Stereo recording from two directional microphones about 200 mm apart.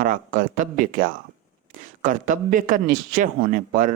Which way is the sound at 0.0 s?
40° right (ahead or behind).